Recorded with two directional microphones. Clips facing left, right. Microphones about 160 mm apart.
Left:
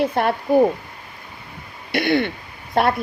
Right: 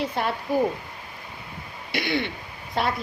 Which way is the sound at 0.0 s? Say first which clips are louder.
Left 7 dB; 55° left (ahead or behind).